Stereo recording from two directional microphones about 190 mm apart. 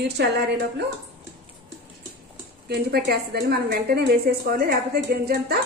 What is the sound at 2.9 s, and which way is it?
A woman's voice, 55° right (ahead or behind).